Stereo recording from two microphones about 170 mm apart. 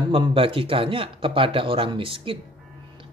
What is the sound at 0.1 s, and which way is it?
Speech, 30° right (ahead or behind).